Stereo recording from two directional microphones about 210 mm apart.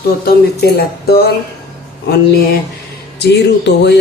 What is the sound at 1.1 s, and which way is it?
Speech, 50° left (ahead or behind).